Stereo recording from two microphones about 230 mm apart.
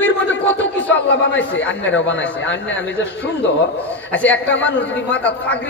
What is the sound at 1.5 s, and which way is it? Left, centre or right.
Speech, left.